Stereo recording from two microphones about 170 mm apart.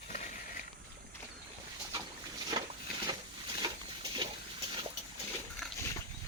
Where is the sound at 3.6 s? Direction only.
25° right (ahead or behind).